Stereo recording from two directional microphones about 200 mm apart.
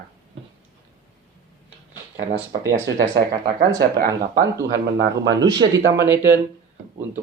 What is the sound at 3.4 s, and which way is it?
Speech, 20° right (ahead or behind).